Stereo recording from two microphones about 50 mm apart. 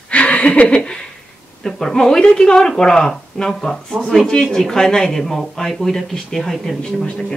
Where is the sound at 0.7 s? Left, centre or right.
Centre.